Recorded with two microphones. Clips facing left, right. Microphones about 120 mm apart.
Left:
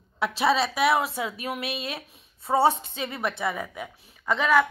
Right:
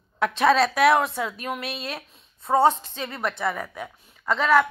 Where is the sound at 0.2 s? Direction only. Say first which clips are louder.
Right 4 dB; 5° left (ahead or behind).